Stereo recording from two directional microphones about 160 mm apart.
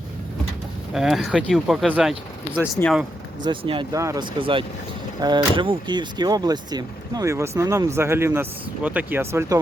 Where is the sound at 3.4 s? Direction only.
30° right (ahead or behind).